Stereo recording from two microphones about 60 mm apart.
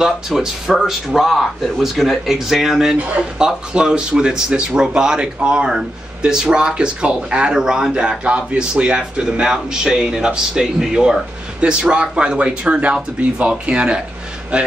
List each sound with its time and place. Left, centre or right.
0.4 s speech: centre